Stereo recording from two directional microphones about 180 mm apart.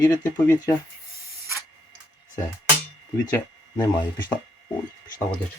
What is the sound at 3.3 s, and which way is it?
Speech, 15° left (ahead or behind).